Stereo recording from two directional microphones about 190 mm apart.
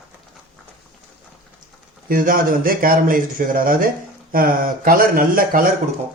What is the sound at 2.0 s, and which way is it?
A man's voice, 50° right (ahead or behind).